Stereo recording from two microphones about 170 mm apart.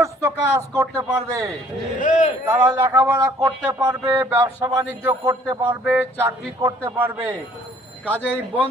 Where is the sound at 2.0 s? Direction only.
50° left (ahead or behind).